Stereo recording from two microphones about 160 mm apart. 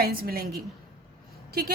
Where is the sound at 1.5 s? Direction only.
70° right (ahead or behind).